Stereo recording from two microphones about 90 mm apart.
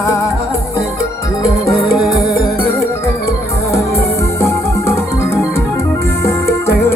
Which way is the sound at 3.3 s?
30° left (ahead or behind).